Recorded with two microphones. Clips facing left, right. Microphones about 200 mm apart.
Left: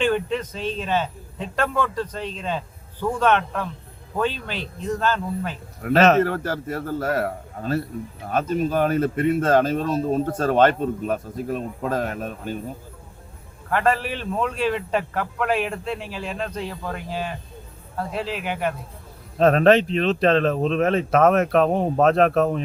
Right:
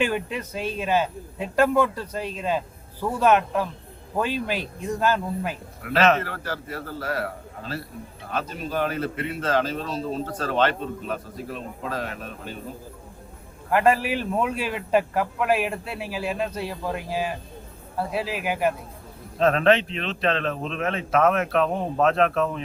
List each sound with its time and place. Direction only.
0.0 s a man's voice: 10° right (ahead or behind)
5.8 s speech: 40° left (ahead or behind)
13.7 s a man's voice: 10° right (ahead or behind)
19.4 s a man's voice: 40° left (ahead or behind)